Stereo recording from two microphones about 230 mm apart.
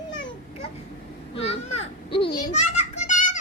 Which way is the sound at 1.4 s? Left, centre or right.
Left.